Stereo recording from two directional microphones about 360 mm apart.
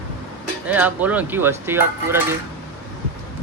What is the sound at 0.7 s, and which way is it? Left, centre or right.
Speech, centre.